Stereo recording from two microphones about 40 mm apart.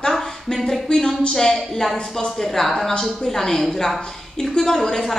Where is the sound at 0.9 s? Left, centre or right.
Centre.